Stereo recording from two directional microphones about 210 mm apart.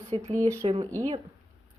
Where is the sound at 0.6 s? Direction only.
25° right (ahead or behind).